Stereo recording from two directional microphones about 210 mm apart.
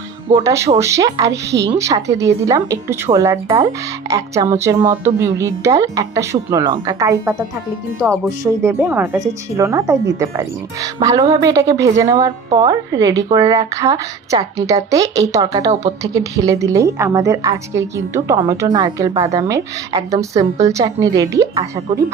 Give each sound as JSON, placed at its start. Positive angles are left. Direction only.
{"t": 0.3, "sound": "speech", "side_deg": -15}